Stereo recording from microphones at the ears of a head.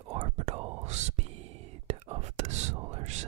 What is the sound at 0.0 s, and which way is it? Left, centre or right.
Whispering, right.